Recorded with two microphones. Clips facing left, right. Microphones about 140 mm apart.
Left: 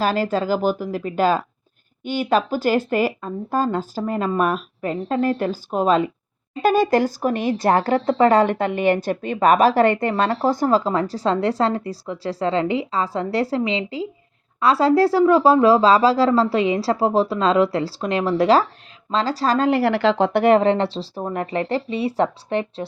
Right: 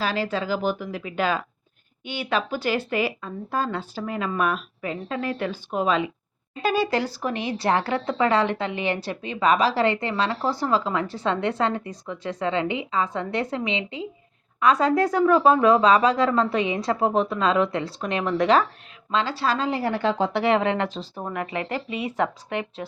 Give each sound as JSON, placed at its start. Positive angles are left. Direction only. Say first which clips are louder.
{"t": 0.0, "sound": "speech", "louder": "left 5 dB", "side_deg": 45}